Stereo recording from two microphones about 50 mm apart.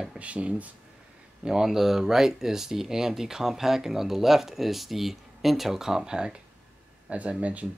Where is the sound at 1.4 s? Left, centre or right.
Centre.